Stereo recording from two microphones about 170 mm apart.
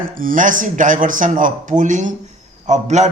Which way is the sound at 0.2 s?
50° right (ahead or behind).